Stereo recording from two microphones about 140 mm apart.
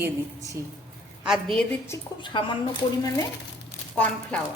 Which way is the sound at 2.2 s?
35° left (ahead or behind).